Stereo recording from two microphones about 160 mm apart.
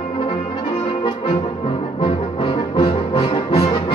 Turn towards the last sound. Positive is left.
turn(degrees=35)  # may be behind; listen again after turning